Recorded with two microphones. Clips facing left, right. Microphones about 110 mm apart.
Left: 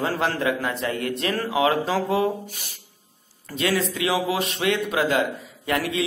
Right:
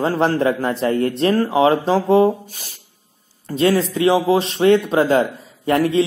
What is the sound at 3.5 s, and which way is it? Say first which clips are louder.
A man's voice: right 7 dB; 35° right (ahead or behind).